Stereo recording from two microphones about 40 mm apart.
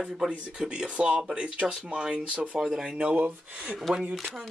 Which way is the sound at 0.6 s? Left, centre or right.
Right.